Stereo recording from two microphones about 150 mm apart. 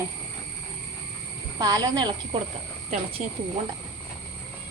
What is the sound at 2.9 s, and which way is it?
Speech, 40° right (ahead or behind).